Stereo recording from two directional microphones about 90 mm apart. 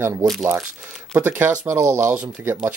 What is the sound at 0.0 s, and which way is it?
Speech, 25° right (ahead or behind).